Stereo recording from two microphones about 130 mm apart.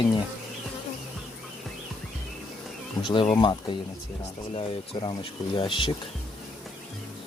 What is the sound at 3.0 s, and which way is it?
Speech, 40° left (ahead or behind).